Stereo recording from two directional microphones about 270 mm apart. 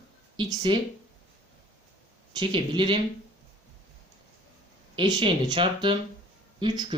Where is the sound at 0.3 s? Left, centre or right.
Centre.